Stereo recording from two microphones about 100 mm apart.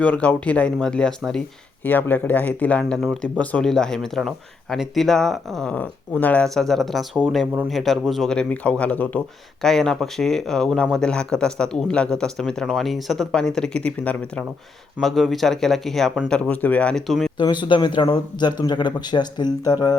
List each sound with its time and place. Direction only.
0.0 s speech: 10° left (ahead or behind)
1.8 s speech: 20° left (ahead or behind)
6.5 s speech: 5° left (ahead or behind)
9.6 s speech: 5° left (ahead or behind)
15.0 s speech: centre (ahead or behind)
17.1 s speech: centre (ahead or behind)
17.3 s speech: 50° left (ahead or behind)